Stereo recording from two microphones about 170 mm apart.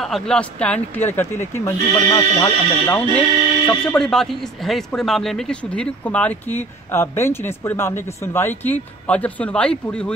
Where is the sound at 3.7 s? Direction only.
5° left (ahead or behind).